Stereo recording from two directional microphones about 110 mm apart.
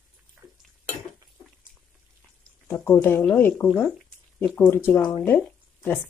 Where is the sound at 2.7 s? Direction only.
20° left (ahead or behind).